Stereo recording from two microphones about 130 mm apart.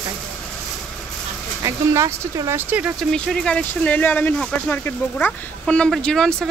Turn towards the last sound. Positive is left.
turn(degrees=5)  # may be behind; listen again after turning